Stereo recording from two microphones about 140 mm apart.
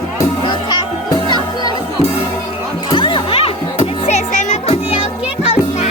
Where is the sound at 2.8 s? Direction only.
35° left (ahead or behind); by 5.8 s 55° left (ahead or behind).